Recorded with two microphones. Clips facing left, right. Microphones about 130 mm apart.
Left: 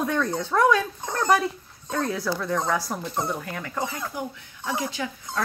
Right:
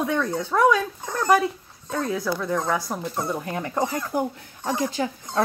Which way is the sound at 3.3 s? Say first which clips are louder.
Right 5 dB; 30° right (ahead or behind).